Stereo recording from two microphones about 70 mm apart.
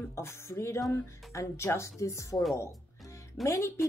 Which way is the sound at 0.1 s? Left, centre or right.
Left.